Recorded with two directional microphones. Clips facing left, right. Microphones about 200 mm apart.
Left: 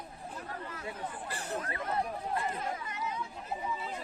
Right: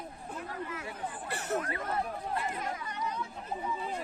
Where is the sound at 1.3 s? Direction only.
70° right (ahead or behind).